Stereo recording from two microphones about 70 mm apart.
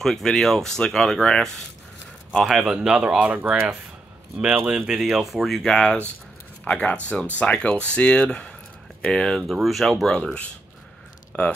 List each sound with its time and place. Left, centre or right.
0.0 s speech: centre
2.3 s speech: centre
9.5 s speech: centre